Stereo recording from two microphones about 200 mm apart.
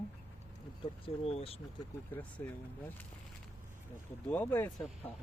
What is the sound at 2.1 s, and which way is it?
Speech, 5° left (ahead or behind).